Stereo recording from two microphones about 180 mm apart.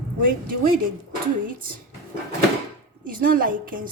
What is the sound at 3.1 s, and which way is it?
Speech, 50° right (ahead or behind).